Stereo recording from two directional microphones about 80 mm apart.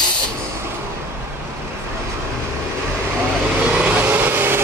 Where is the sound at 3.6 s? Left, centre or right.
Centre.